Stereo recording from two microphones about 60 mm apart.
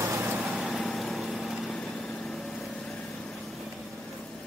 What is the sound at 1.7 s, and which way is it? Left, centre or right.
Vehicle, centre.